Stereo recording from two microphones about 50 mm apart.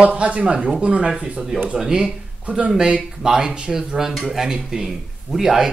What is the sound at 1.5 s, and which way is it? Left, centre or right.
Speech, centre.